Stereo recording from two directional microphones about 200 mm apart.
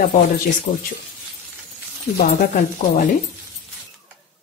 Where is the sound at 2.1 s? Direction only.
50° left (ahead or behind).